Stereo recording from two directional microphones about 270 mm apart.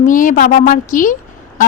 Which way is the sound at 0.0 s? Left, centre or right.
Left.